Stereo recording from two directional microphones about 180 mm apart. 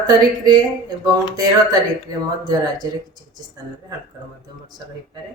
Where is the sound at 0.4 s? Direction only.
20° right (ahead or behind).